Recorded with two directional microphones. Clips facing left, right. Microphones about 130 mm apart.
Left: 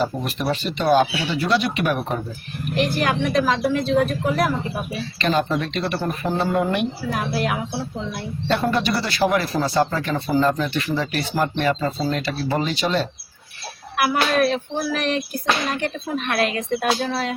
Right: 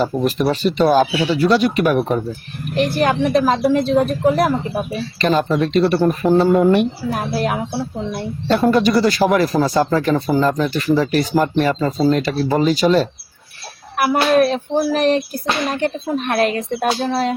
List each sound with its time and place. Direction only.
0.3 s speech: 40° right (ahead or behind)